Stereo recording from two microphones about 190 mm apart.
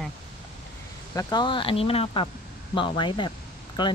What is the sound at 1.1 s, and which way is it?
Speech, 25° left (ahead or behind).